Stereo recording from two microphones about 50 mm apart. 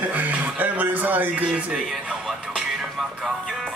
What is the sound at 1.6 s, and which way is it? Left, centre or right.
Speech, right.